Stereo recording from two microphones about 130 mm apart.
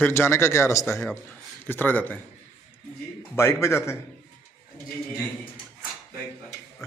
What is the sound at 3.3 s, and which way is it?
Speech, 20° left (ahead or behind).